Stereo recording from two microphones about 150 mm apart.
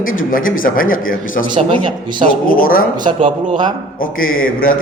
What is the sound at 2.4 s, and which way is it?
Speech, 70° left (ahead or behind).